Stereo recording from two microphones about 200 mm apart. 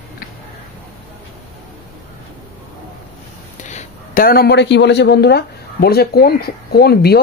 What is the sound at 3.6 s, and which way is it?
Speech, 40° left (ahead or behind).